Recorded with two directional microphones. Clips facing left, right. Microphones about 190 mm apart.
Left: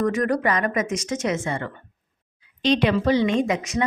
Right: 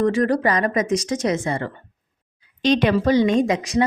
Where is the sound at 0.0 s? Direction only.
30° right (ahead or behind).